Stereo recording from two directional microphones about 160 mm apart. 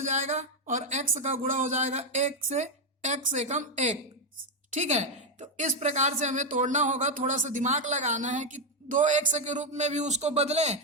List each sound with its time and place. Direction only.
0.0 s a woman's voice: 50° right (ahead or behind)